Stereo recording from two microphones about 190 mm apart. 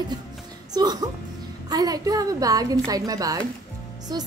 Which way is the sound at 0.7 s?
20° right (ahead or behind).